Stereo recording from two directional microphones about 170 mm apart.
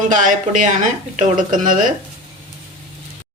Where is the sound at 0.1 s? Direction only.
50° right (ahead or behind).